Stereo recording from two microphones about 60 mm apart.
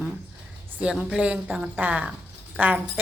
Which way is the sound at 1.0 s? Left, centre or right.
Centre.